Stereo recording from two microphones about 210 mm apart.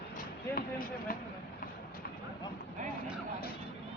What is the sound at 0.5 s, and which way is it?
Speech, 40° left (ahead or behind).